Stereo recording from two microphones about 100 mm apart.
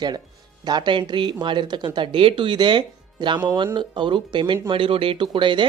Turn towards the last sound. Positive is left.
turn(degrees=-55)  # may be behind; listen again after turning